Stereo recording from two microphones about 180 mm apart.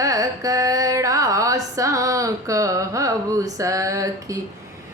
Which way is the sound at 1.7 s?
15° right (ahead or behind).